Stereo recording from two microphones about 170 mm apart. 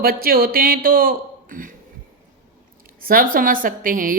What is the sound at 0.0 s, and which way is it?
Speech, 60° right (ahead or behind).